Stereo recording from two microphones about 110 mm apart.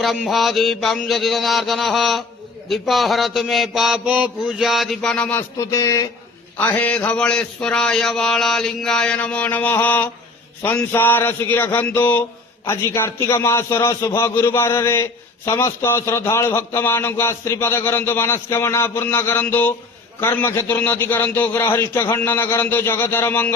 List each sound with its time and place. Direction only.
0.0 s mantra: centre (ahead or behind)
5.5 s speech: 30° left (ahead or behind)
6.6 s a man's voice: 15° left (ahead or behind)